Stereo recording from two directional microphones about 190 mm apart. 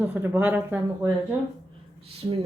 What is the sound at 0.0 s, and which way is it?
Speech, 10° right (ahead or behind).